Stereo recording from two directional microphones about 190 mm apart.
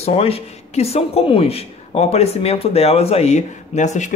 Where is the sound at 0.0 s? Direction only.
30° left (ahead or behind).